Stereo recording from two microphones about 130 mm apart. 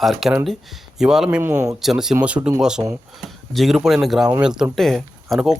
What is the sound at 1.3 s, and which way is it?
Speech, 15° right (ahead or behind).